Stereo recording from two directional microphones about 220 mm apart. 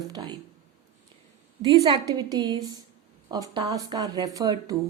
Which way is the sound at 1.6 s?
20° right (ahead or behind).